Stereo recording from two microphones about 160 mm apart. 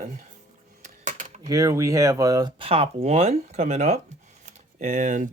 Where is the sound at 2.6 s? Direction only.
35° right (ahead or behind).